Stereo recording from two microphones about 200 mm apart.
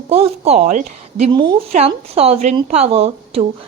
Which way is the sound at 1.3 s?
25° right (ahead or behind).